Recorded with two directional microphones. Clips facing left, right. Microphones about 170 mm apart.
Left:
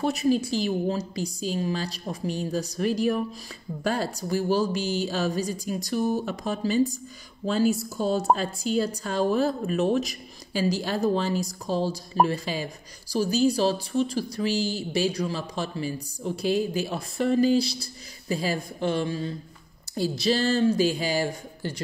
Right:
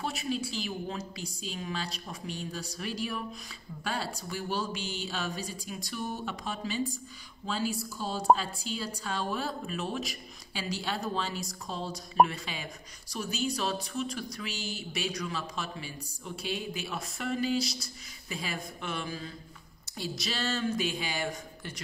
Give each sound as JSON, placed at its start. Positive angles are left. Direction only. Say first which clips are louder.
{"t": 0.0, "sound": "speech", "louder": "left 10 dB", "side_deg": 40}